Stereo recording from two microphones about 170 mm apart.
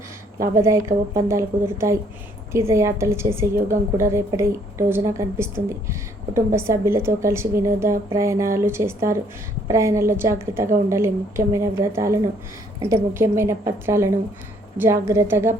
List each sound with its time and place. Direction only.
0.5 s a woman's voice: 15° right (ahead or behind)